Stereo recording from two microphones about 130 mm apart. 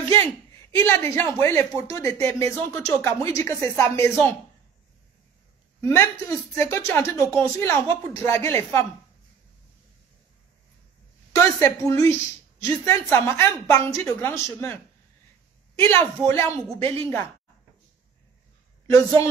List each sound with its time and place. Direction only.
0.1 s a man's voice: 20° left (ahead or behind)
5.8 s a woman's voice: 20° left (ahead or behind)
11.3 s a woman's voice: 20° left (ahead or behind)
15.7 s a woman's voice: 20° left (ahead or behind)